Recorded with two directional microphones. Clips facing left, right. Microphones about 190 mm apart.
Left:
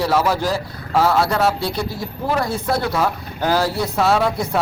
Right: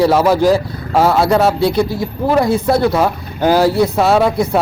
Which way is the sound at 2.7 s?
15° right (ahead or behind).